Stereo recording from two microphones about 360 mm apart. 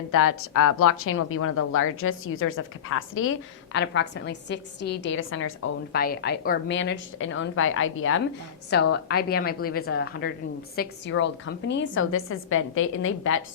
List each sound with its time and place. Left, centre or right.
0.1 s a woman's voice: left